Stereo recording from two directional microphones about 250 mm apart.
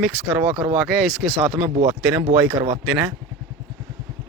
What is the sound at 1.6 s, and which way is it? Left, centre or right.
Speech, right.